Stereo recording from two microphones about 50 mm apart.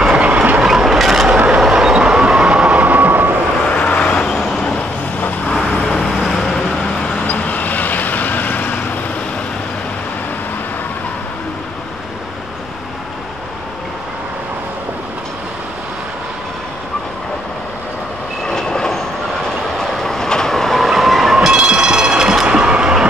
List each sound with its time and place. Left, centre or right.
0.1 s train: right
0.7 s train: centre
1.6 s vehicle: centre
2.8 s train: right
3.6 s vehicle: left
4.4 s vehicle: centre
5.8 s vehicle: centre
7.2 s vehicle: left
18.4 s train: centre; by 23.0 s right